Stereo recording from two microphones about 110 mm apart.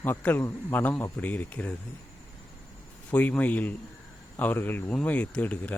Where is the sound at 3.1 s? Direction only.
15° left (ahead or behind).